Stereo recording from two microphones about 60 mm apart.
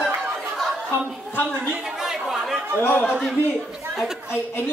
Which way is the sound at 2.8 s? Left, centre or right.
Left.